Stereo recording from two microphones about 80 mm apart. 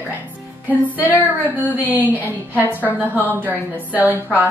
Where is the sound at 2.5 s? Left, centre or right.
Left.